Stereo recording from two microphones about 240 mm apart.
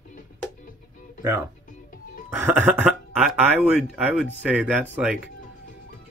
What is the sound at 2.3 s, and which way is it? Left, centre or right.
Speech, centre.